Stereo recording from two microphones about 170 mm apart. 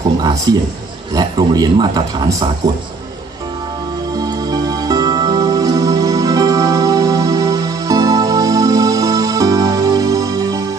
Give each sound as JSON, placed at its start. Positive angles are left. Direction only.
{"t": 0.2, "sound": "a man's voice", "side_deg": -20}
{"t": 4.2, "sound": "music", "side_deg": -25}